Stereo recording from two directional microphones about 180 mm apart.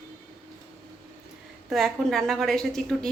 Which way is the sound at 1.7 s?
Centre (ahead or behind).